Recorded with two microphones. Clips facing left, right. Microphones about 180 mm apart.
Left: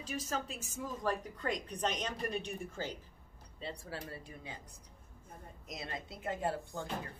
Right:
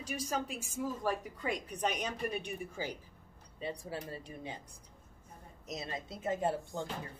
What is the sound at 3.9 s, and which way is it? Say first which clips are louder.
Speech: right 3 dB; 20° right (ahead or behind).